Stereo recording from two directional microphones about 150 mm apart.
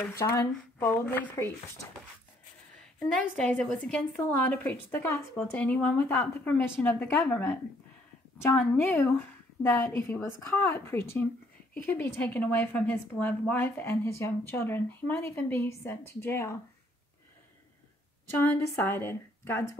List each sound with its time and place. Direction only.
0.1 s speech: 20° left (ahead or behind)
3.0 s speech: 10° left (ahead or behind)
18.4 s speech: 15° left (ahead or behind)